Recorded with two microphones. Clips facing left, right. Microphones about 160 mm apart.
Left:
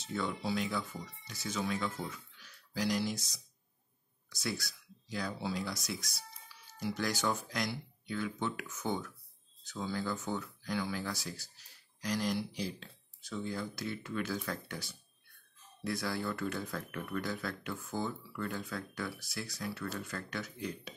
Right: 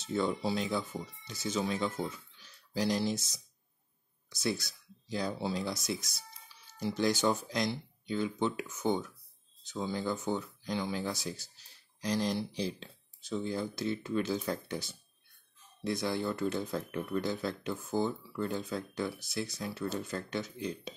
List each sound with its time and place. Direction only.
0.0 s speech: 30° right (ahead or behind)